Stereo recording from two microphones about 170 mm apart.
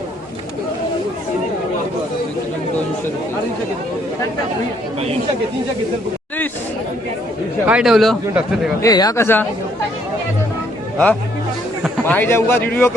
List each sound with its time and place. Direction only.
7.7 s a man's voice: 5° right (ahead or behind)
8.8 s a man's voice: 20° left (ahead or behind)
10.9 s a man's voice: 10° left (ahead or behind)